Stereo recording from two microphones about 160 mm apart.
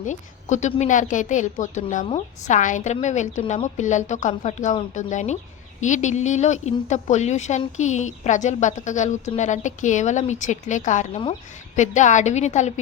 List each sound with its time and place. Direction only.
0.0 s a woman's voice: 50° left (ahead or behind)